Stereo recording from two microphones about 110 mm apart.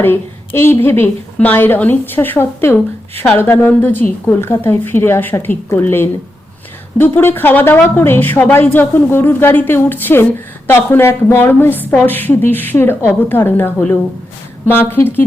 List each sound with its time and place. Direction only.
0.0 s a woman's voice: 20° left (ahead or behind)
7.2 s a woman's voice: 20° left (ahead or behind)